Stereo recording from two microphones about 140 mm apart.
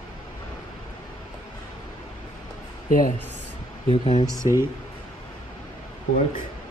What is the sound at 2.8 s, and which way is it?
Speech, 70° left (ahead or behind).